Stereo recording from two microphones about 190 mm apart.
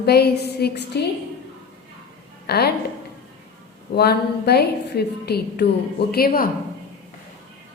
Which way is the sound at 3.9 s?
60° left (ahead or behind).